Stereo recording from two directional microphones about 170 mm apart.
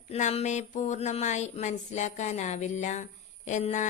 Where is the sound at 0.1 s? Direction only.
40° left (ahead or behind).